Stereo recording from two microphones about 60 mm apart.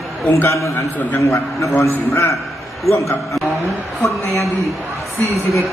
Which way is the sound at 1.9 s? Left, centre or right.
Left.